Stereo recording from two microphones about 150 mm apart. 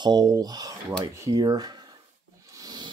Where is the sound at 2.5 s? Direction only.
25° right (ahead or behind).